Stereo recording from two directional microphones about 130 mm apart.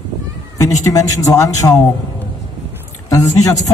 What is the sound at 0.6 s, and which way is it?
Speech, 25° left (ahead or behind).